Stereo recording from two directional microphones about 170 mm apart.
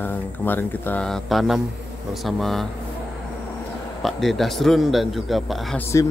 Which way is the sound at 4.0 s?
Centre (ahead or behind).